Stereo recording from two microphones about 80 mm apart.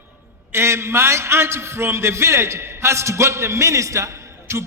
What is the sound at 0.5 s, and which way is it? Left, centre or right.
A man's voice, right.